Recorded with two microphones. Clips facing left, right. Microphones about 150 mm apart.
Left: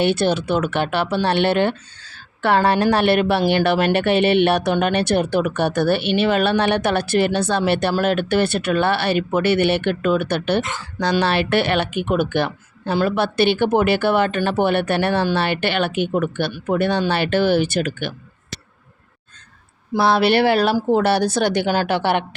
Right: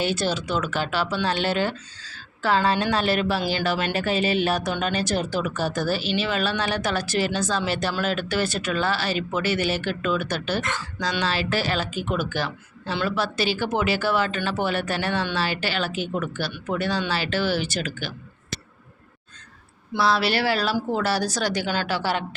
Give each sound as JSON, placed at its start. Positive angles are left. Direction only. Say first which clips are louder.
{"t": 0.0, "sound": "speech", "louder": "left 7 dB", "side_deg": 60}
{"t": 19.9, "sound": "speech", "louder": "left 6 dB", "side_deg": 55}